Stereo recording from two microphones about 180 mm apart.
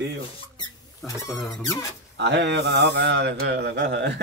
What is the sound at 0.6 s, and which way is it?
Rodents, 15° left (ahead or behind).